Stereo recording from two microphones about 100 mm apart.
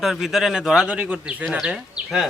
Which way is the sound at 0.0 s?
Centre (ahead or behind).